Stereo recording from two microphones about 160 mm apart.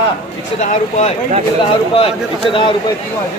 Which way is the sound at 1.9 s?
35° left (ahead or behind).